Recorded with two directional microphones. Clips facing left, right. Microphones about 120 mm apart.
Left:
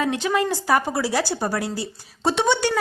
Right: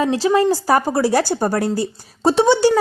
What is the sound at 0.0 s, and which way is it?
A woman's voice, 30° right (ahead or behind).